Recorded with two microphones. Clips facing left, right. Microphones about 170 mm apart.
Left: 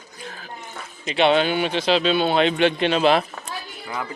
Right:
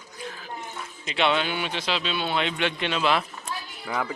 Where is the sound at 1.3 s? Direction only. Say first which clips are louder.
Left 7 dB; 30° left (ahead or behind).